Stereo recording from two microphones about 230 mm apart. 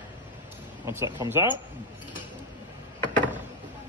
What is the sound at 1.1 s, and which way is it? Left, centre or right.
Speech, centre.